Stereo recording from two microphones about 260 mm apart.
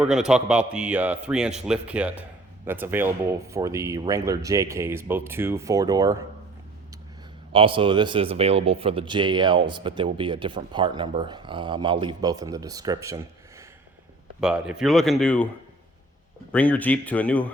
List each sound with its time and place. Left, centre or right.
0.0 s a man's voice: centre
7.5 s speech: centre
14.4 s a man's voice: centre
16.5 s a man's voice: centre